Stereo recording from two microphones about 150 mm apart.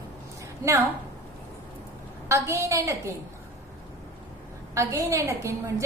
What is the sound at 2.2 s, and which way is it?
Speech, 20° right (ahead or behind).